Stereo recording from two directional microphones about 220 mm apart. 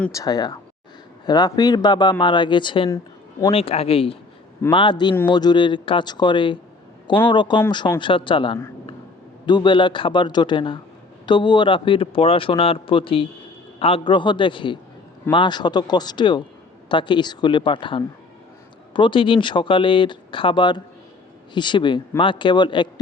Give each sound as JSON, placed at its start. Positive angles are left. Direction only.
{"t": 0.0, "sound": "speech", "side_deg": 15}